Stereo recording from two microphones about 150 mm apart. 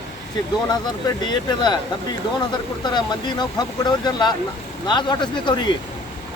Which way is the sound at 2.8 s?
30° left (ahead or behind).